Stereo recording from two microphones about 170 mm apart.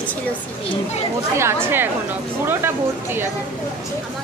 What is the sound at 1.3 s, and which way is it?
Speech, 15° right (ahead or behind).